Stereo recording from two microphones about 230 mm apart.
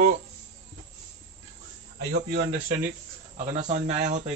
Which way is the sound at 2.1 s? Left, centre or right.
Right.